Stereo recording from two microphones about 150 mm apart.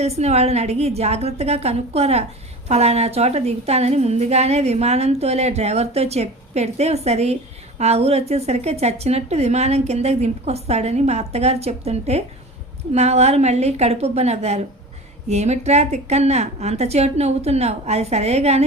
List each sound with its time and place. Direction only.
0.0 s a woman's voice: 45° right (ahead or behind)